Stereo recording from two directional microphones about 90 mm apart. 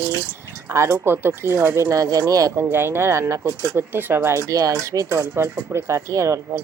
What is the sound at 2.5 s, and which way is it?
Speech, 25° right (ahead or behind).